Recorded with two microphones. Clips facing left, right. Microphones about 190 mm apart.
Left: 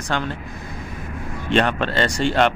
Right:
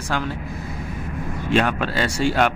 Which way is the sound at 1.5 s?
5° right (ahead or behind).